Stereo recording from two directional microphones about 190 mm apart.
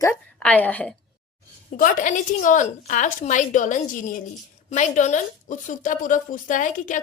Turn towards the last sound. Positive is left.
turn(degrees=40)  # may be behind; listen again after turning